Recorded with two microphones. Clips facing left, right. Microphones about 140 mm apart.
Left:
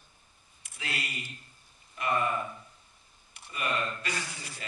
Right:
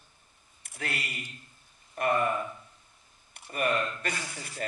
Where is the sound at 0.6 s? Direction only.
50° right (ahead or behind).